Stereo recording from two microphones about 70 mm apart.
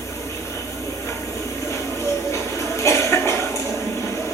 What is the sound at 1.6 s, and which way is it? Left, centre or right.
Music, left.